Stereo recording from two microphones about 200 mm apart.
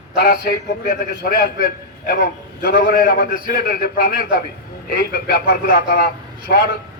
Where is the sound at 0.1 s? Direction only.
50° left (ahead or behind).